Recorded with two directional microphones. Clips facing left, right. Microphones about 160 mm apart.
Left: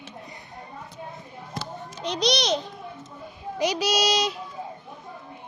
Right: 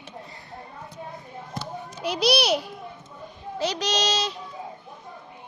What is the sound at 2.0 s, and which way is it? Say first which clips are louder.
Speech: right 2 dB; 5° right (ahead or behind).